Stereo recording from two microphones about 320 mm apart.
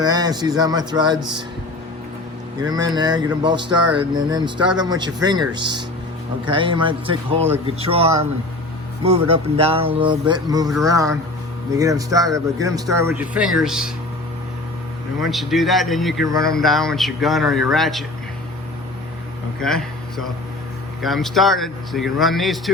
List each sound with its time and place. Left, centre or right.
0.0 s speech: centre
2.6 s speech: centre
6.4 s a man's voice: centre
15.2 s speech: centre
19.5 s speech: centre